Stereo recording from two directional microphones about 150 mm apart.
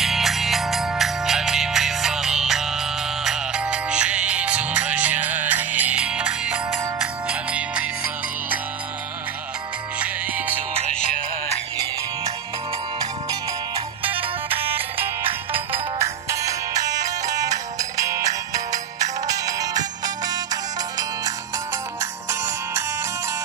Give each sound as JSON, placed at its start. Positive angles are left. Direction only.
{"t": 0.0, "sound": "music", "side_deg": 0}
{"t": 9.9, "sound": "music", "side_deg": -10}
{"t": 14.6, "sound": "music", "side_deg": -15}
{"t": 15.2, "sound": "music", "side_deg": -40}
{"t": 16.0, "sound": "music", "side_deg": -20}